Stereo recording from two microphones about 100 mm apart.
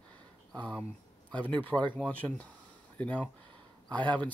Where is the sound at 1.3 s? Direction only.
15° left (ahead or behind).